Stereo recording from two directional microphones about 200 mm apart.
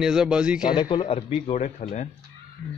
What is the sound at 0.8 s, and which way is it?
A man's voice, 25° left (ahead or behind).